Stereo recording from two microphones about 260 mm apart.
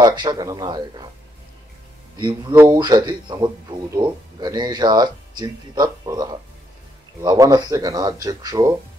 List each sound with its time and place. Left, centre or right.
0.0 s speech: centre
2.1 s speech: centre